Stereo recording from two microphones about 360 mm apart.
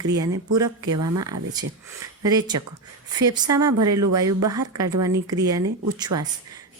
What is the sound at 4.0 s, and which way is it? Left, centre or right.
Speech, right.